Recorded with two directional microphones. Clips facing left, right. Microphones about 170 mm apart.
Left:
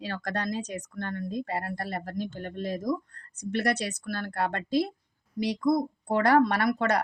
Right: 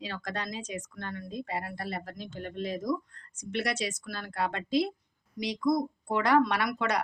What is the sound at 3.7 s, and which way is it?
A woman's voice, 65° left (ahead or behind).